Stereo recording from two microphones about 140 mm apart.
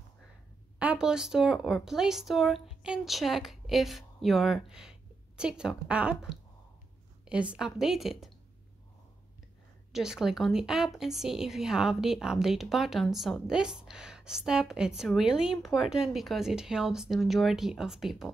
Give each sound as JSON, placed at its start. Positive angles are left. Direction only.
{"t": 0.7, "sound": "a woman's voice", "side_deg": -5}
{"t": 9.9, "sound": "a woman's voice", "side_deg": -5}